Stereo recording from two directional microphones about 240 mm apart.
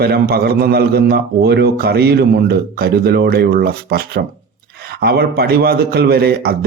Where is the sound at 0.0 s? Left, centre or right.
Right.